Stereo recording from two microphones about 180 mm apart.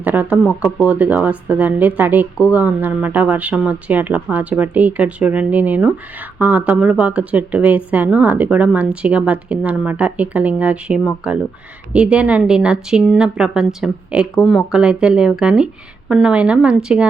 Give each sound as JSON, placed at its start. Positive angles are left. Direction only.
{"t": 0.0, "sound": "a woman's voice", "side_deg": -10}